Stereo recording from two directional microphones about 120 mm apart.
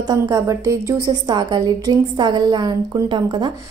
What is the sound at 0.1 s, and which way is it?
A woman's voice, 25° right (ahead or behind).